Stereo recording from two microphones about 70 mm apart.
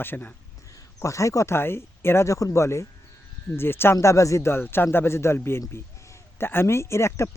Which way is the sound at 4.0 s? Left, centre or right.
Left.